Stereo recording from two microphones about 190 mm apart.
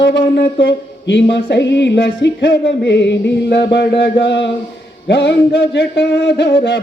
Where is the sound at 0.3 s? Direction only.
70° left (ahead or behind).